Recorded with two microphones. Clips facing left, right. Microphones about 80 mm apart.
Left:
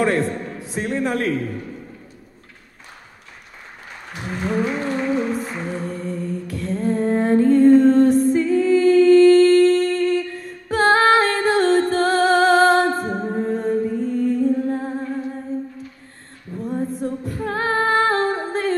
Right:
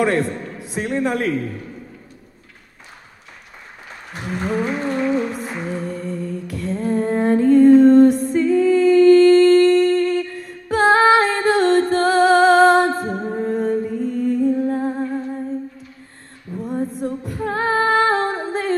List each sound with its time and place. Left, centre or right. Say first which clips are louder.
0.0 s a man's voice: right 1 dB; centre
4.2 s humming: even; centre
16.5 s female singing: even; centre